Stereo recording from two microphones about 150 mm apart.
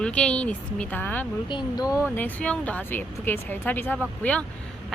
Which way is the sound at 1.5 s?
30° left (ahead or behind).